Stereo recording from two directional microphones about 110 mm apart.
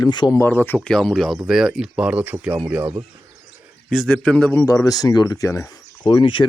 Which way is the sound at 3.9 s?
5° left (ahead or behind).